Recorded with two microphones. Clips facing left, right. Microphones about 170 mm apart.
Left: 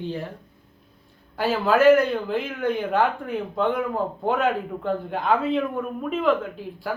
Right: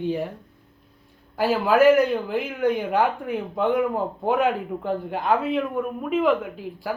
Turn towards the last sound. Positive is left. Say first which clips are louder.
# even
turn(degrees=-10)  # may be behind; listen again after turning